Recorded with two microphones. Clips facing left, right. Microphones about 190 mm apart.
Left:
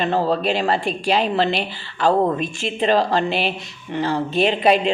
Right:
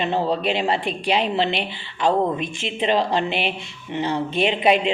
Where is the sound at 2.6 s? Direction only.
20° right (ahead or behind).